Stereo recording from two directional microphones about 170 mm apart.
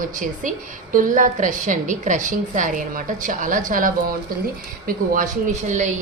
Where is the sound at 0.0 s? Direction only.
50° right (ahead or behind).